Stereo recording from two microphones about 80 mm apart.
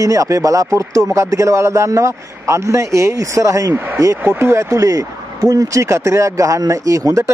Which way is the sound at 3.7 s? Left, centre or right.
Right.